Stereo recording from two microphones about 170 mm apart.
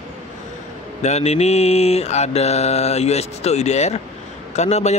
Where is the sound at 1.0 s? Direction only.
40° left (ahead or behind).